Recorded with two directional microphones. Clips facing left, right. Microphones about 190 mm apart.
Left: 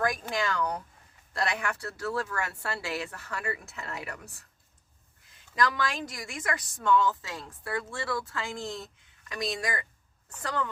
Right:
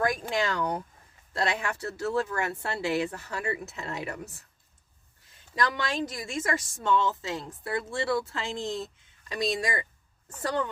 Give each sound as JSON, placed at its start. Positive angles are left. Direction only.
{"t": 0.0, "sound": "speech", "side_deg": -25}
{"t": 5.5, "sound": "speech", "side_deg": -25}